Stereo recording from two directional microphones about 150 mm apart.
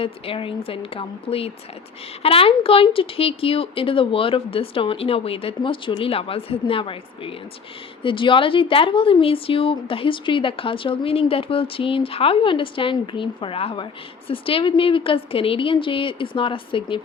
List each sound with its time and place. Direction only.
0.0 s a woman's voice: 35° left (ahead or behind)